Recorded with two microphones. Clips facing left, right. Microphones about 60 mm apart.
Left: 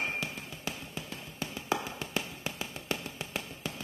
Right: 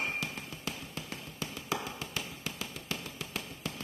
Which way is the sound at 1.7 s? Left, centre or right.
Left.